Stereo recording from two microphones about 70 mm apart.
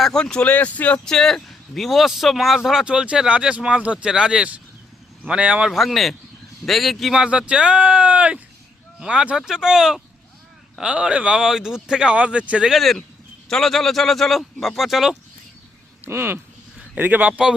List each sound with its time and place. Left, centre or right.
0.0 s speech: centre
1.0 s speech: centre
5.6 s speech: centre
12.6 s speech: centre
16.0 s speech: right
16.9 s speech: right